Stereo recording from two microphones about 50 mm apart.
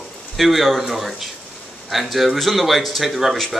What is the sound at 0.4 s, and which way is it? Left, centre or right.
Speech, centre.